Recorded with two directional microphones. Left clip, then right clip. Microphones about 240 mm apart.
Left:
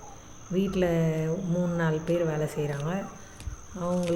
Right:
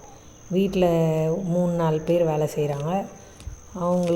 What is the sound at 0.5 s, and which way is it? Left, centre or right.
Speech, centre.